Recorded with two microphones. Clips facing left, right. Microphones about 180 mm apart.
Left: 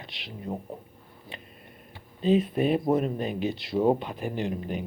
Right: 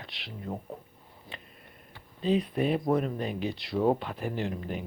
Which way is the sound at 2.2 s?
25° left (ahead or behind).